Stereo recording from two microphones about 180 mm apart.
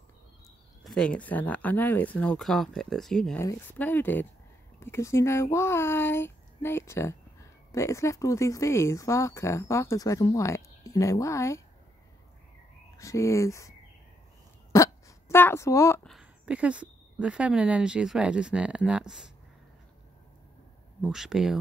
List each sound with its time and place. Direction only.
0.8 s speech: 5° left (ahead or behind)
12.9 s speech: 15° left (ahead or behind)
14.7 s hiccup: 15° left (ahead or behind)
16.0 s speech: centre (ahead or behind)
21.0 s speech: 5° right (ahead or behind)